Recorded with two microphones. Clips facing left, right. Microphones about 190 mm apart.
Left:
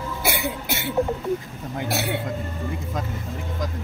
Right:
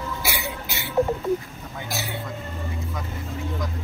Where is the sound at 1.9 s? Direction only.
65° left (ahead or behind).